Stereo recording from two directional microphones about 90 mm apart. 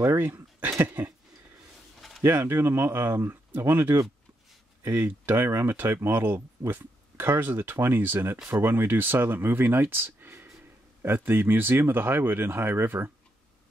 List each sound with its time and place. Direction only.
0.0 s speech: 25° right (ahead or behind)
2.0 s a sound: centre (ahead or behind)
2.2 s speech: 25° right (ahead or behind)